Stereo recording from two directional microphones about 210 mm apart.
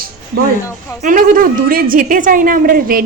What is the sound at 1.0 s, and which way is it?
A woman's voice, 40° right (ahead or behind).